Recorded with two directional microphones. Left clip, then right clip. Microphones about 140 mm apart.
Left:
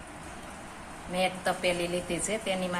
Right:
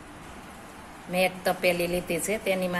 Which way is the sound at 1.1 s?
55° right (ahead or behind).